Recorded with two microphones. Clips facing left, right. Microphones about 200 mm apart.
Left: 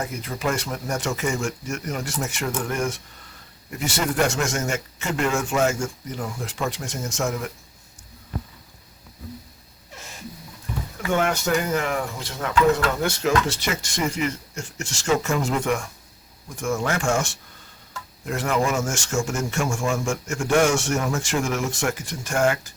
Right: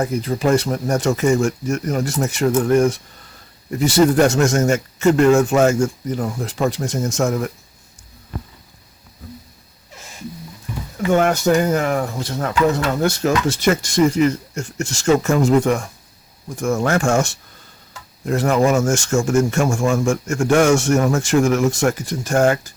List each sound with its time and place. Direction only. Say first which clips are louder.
0.0 s speech: right 8 dB; 35° right (ahead or behind)
11.1 s speech: right 7 dB; 40° right (ahead or behind)